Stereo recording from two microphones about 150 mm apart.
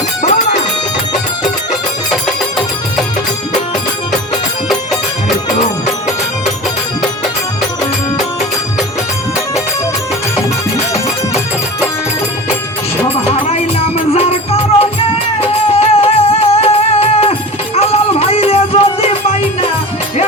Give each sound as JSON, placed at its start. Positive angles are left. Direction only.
{"t": 0.2, "sound": "music", "side_deg": 55}
{"t": 13.5, "sound": "music", "side_deg": 40}